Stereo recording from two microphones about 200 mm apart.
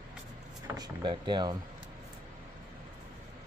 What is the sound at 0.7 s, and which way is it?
Vehicle, 20° right (ahead or behind).